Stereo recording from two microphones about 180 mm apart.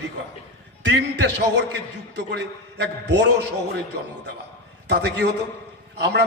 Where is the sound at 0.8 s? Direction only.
75° right (ahead or behind).